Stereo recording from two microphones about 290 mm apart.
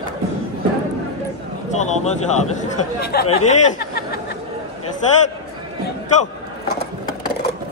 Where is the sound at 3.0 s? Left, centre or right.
Left.